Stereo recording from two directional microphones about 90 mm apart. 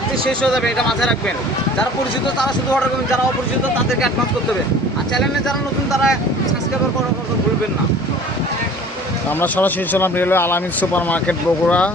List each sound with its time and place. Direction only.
0.3 s speech: 5° left (ahead or behind)
5.5 s speech: centre (ahead or behind)
9.4 s speech: 20° left (ahead or behind)